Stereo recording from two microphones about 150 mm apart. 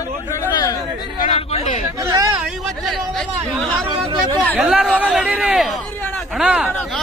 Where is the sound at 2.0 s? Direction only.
20° right (ahead or behind).